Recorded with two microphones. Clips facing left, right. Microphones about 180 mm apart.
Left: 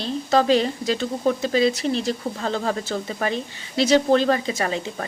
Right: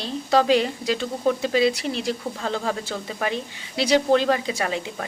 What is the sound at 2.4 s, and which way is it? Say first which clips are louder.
Speech: left 2 dB; centre (ahead or behind).